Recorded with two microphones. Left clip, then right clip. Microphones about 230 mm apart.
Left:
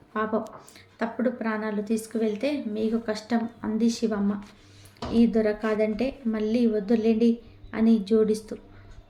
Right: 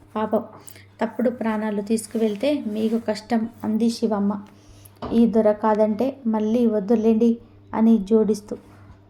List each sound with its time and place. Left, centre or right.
0.1 s a woman's voice: centre
5.4 s a woman's voice: centre